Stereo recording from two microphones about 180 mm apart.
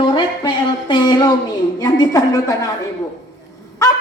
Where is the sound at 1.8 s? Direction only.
20° left (ahead or behind).